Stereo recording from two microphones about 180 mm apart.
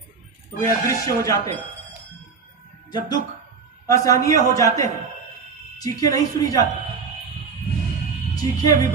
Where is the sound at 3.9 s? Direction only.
20° left (ahead or behind).